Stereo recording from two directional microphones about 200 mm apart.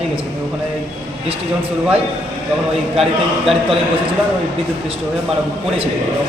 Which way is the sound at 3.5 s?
Centre (ahead or behind).